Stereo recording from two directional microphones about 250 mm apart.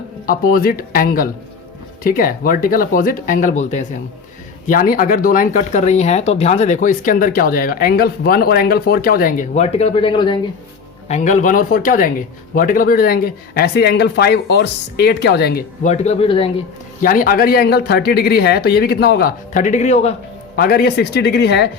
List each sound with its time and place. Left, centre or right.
0.3 s speech: left; by 10.4 s centre
11.1 s speech: left
17.1 s speech: left
20.6 s speech: left